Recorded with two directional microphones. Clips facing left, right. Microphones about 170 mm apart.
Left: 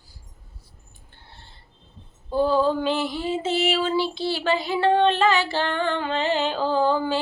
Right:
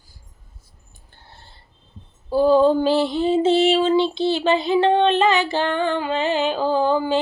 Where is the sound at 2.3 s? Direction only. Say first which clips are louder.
Right 5 dB; 15° right (ahead or behind).